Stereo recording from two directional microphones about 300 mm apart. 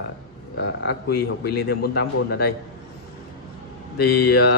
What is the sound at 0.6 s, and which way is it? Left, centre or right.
Speech, left.